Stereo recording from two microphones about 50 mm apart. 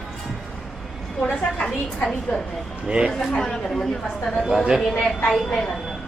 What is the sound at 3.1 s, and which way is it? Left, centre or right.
Speech, centre.